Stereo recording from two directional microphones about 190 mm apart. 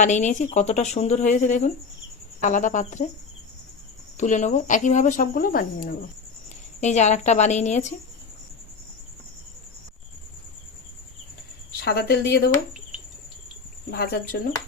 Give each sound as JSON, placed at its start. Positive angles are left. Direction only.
{"t": 0.0, "sound": "speech", "side_deg": 40}
{"t": 4.2, "sound": "speech", "side_deg": 40}
{"t": 6.8, "sound": "speech", "side_deg": 35}
{"t": 11.9, "sound": "speech", "side_deg": 55}
{"t": 13.9, "sound": "speech", "side_deg": 55}